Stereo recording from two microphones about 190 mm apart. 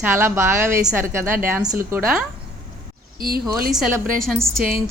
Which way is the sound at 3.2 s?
50° right (ahead or behind).